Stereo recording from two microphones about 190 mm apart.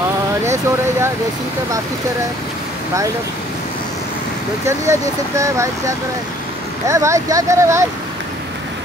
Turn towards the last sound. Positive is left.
turn(degrees=-15)  # may be behind; listen again after turning